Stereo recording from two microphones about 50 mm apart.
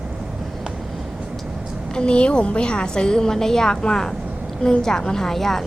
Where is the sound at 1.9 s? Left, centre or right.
Centre.